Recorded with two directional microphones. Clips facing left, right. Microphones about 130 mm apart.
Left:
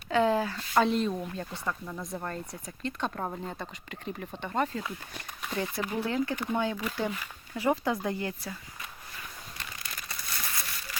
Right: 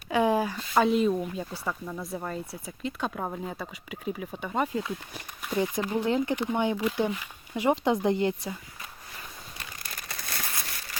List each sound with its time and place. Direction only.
0.1 s speech: 15° right (ahead or behind)
10.2 s crumpling: 60° right (ahead or behind)